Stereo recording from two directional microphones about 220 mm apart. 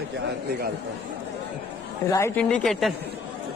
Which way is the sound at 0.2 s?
45° right (ahead or behind).